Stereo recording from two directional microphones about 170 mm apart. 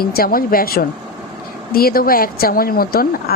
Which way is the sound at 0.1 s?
60° left (ahead or behind).